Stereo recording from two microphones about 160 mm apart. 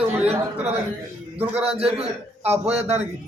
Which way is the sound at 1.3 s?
10° right (ahead or behind).